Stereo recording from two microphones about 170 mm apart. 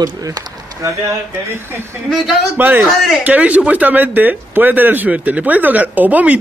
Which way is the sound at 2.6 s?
10° right (ahead or behind).